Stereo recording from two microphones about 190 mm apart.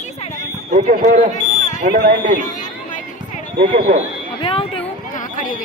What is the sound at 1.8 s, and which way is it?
Speech, 40° right (ahead or behind).